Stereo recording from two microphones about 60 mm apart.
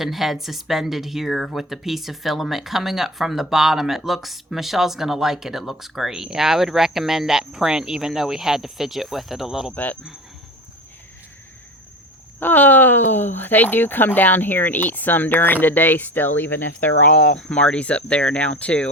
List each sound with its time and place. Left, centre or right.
0.0 s speech: centre
9.7 s speech: left
12.4 s speech: left
17.1 s speech: centre